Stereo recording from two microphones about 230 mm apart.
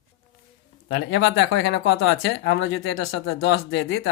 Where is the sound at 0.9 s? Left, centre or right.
Left.